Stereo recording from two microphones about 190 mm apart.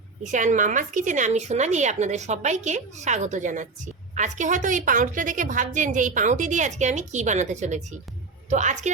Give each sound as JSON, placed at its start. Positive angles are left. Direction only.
{"t": 0.2, "sound": "a woman's voice", "side_deg": -40}